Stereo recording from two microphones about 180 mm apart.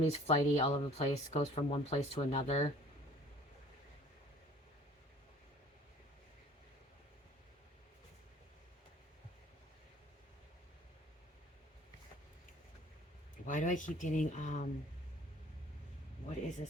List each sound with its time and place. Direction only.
0.0 s speech: 35° left (ahead or behind)
13.4 s speech: 45° left (ahead or behind)